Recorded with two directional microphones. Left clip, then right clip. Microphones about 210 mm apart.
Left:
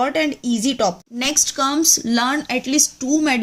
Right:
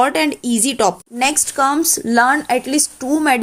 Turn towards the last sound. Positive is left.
turn(degrees=-10)  # may be behind; listen again after turning